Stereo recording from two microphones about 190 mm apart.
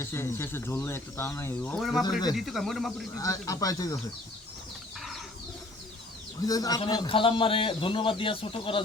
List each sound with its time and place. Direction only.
0.0 s speech: 15° left (ahead or behind)
1.8 s speech: centre (ahead or behind)
3.2 s speech: 15° left (ahead or behind)
6.4 s a man's voice: 20° left (ahead or behind)